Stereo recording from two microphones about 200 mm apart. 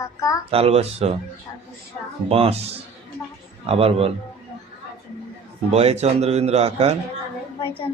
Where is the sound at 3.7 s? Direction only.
30° right (ahead or behind).